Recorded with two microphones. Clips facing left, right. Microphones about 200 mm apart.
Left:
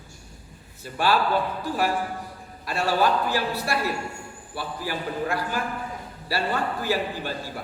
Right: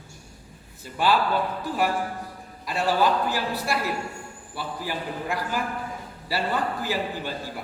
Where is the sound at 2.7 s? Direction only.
15° right (ahead or behind).